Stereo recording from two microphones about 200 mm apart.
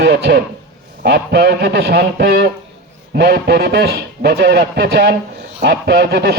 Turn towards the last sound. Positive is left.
turn(degrees=-50)  # may be behind; listen again after turning